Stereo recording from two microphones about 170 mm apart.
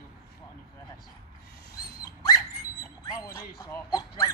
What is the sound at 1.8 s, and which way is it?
Dog, 65° left (ahead or behind).